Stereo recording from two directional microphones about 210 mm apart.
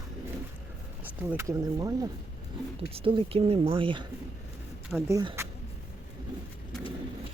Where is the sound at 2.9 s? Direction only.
25° right (ahead or behind).